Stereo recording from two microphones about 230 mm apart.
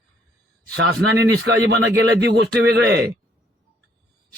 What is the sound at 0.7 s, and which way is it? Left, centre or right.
Speech, right.